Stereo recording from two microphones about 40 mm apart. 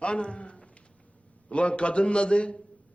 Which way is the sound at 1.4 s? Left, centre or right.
Left.